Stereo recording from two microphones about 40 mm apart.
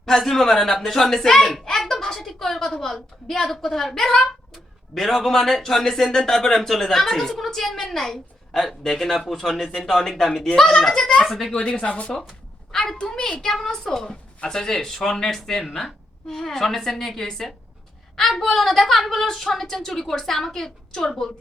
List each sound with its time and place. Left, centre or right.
0.0 s speech: centre
1.6 s a sound: centre
2.8 s speech: centre
11.6 s speech: left
12.7 s a woman's voice: centre
13.1 s speech: left
13.4 s speech: centre